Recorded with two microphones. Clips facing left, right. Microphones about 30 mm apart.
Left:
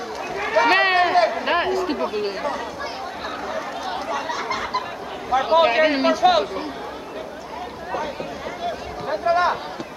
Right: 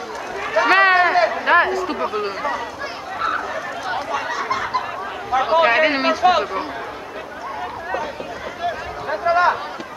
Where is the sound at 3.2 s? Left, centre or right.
Centre.